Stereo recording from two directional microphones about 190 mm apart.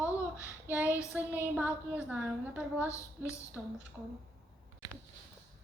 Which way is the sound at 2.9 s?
15° left (ahead or behind).